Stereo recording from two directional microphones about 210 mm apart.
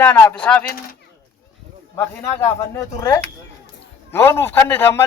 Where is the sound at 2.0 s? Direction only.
15° left (ahead or behind).